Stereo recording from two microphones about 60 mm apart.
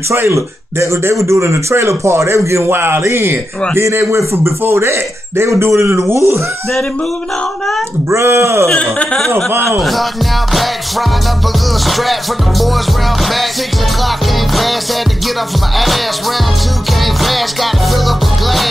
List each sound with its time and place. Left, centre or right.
0.3 s speech: right
2.7 s speech: right
8.1 s speech: right
9.7 s music: centre
17.0 s music: centre